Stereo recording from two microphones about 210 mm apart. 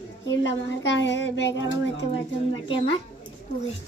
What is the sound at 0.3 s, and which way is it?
Child singing, 60° left (ahead or behind).